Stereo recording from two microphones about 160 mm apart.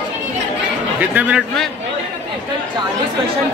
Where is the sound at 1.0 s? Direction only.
10° right (ahead or behind).